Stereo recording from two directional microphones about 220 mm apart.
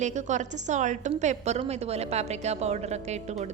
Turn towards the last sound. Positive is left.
turn(degrees=-30)  # may be behind; listen again after turning